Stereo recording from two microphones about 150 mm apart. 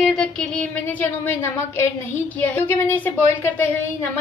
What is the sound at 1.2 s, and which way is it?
A woman's voice, 15° left (ahead or behind).